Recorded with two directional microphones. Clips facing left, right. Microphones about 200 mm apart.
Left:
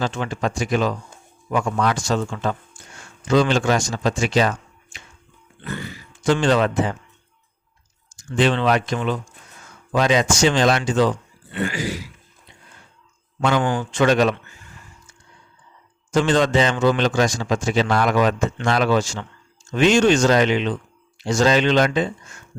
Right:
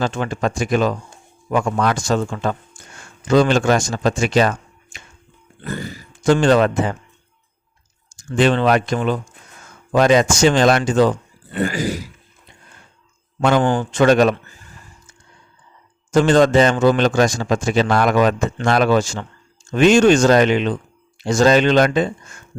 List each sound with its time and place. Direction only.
0.0 s speech: 50° right (ahead or behind)
5.6 s grunt: 40° right (ahead or behind)
8.1 s speech: 50° right (ahead or behind)
11.5 s a sound: 40° right (ahead or behind)
13.4 s speech: 50° right (ahead or behind)
16.1 s speech: 45° right (ahead or behind)